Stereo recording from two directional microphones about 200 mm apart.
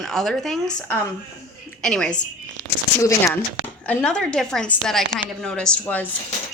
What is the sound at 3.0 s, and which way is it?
Speech, 15° left (ahead or behind).